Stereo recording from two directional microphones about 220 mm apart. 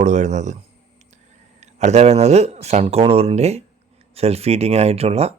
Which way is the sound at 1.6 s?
30° right (ahead or behind).